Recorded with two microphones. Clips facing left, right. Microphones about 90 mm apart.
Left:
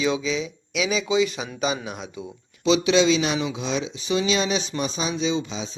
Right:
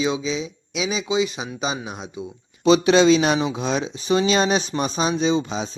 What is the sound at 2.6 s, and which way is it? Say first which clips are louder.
Speech: right 4 dB; 45° right (ahead or behind).